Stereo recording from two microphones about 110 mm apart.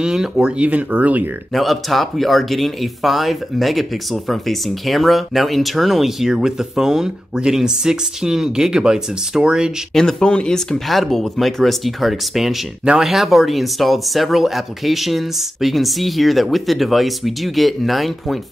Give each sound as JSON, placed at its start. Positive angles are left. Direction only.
{"t": 0.0, "sound": "speech", "side_deg": -5}
{"t": 1.5, "sound": "speech", "side_deg": 0}
{"t": 9.9, "sound": "speech", "side_deg": 5}